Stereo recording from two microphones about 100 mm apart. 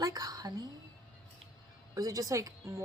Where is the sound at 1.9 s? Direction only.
35° right (ahead or behind).